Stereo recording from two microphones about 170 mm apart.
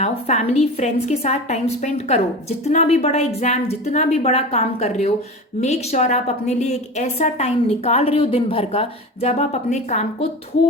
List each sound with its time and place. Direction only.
0.0 s a woman's voice: 40° left (ahead or behind)